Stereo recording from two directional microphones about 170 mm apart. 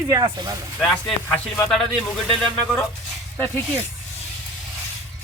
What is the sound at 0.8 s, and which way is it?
Speech, centre (ahead or behind).